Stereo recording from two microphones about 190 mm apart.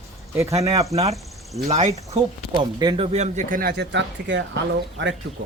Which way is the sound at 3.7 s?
65° right (ahead or behind).